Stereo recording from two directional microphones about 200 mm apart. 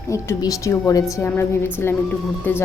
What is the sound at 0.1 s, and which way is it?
A woman's voice, 15° left (ahead or behind).